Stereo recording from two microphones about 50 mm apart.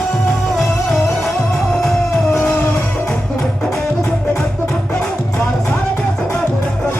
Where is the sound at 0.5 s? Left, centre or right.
Centre.